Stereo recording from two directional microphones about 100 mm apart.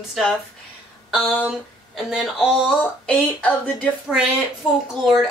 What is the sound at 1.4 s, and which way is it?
Speech, 5° right (ahead or behind).